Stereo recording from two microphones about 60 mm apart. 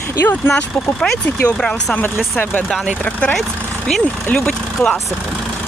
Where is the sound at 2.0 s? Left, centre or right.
Left.